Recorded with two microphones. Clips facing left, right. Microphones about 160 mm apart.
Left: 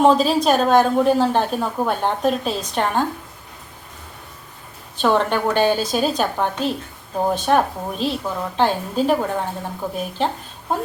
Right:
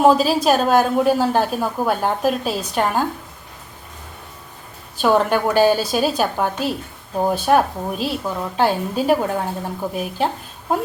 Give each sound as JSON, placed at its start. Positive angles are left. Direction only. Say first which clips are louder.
{"t": 0.0, "sound": "a woman's voice", "louder": "right 1 dB", "side_deg": -5}
{"t": 4.9, "sound": "a woman's voice", "louder": "right 2 dB", "side_deg": -5}